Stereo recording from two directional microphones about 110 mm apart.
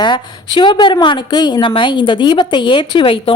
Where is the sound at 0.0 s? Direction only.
45° left (ahead or behind).